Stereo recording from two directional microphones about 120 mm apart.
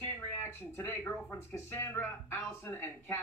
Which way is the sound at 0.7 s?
15° left (ahead or behind).